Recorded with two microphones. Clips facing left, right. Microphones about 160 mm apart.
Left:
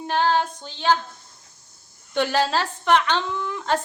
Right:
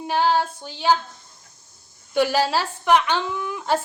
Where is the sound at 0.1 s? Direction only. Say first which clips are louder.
Right 1 dB; 10° right (ahead or behind).